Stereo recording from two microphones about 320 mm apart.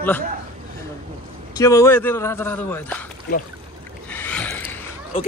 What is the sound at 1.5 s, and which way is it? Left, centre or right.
Speech, centre.